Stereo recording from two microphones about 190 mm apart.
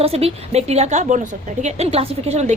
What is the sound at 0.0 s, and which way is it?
Speech, 30° right (ahead or behind).